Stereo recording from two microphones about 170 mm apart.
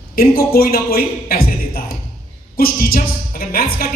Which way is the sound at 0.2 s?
60° left (ahead or behind).